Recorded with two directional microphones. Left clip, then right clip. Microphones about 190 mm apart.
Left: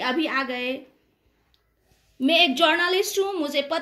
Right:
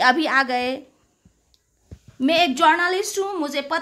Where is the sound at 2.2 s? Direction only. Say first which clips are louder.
Right 2 dB; 30° right (ahead or behind).